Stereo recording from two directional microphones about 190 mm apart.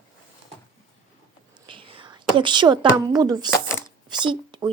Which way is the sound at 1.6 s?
25° right (ahead or behind).